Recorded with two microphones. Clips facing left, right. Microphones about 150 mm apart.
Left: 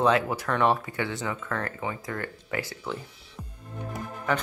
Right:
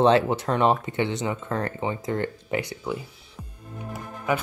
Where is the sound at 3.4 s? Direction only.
5° right (ahead or behind).